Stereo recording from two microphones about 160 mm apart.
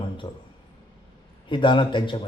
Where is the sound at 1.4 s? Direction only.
30° left (ahead or behind).